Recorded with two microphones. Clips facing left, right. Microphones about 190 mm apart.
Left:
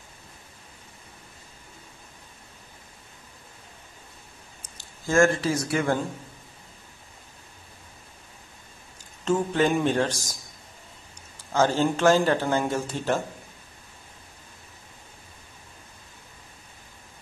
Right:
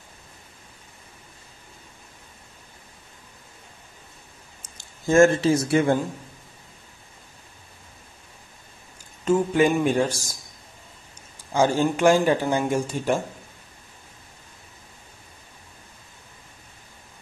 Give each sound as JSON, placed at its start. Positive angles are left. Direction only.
{"t": 4.6, "sound": "speech", "side_deg": -20}
{"t": 9.2, "sound": "speech", "side_deg": -10}
{"t": 11.5, "sound": "speech", "side_deg": -15}